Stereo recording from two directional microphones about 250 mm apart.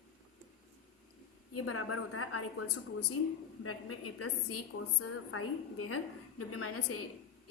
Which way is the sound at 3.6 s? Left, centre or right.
Left.